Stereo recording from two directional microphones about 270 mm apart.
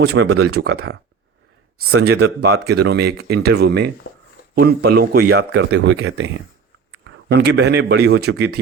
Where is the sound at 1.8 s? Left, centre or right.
Right.